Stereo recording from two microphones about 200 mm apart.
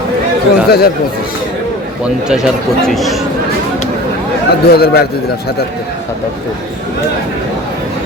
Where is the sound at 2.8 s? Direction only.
Centre (ahead or behind).